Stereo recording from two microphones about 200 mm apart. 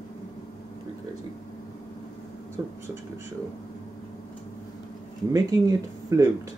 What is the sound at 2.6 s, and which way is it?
Speech, 15° right (ahead or behind).